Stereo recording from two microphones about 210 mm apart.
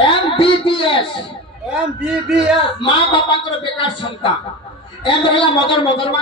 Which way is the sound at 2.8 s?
25° left (ahead or behind).